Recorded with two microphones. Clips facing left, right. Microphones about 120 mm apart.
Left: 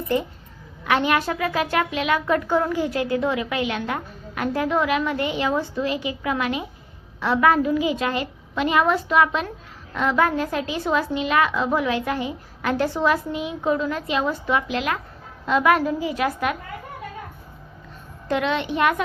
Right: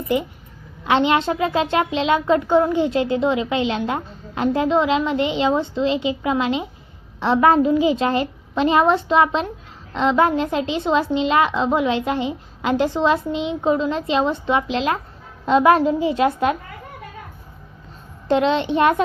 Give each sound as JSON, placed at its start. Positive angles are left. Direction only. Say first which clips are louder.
{"t": 0.1, "sound": "a woman's voice", "louder": "right 2 dB", "side_deg": -15}
{"t": 18.3, "sound": "speech", "louder": "right 5 dB", "side_deg": -30}